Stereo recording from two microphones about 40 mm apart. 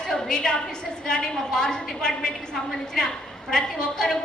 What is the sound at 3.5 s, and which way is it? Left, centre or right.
Speech, centre.